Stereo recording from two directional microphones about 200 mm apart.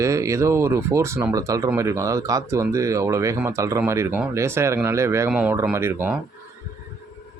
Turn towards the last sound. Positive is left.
turn(degrees=-10)  # may be behind; listen again after turning